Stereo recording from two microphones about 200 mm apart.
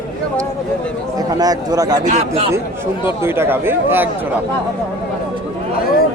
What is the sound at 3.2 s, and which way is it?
Speech, 10° right (ahead or behind).